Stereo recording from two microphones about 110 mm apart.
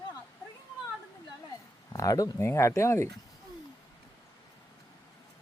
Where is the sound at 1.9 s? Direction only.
30° left (ahead or behind).